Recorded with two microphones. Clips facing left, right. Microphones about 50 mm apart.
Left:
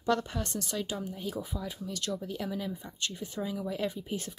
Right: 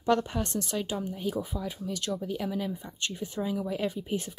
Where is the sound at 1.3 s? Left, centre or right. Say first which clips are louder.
Right 4 dB; centre.